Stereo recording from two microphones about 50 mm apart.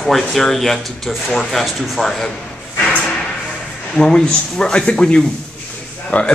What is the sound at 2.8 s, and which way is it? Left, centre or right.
Drawer open or close, left.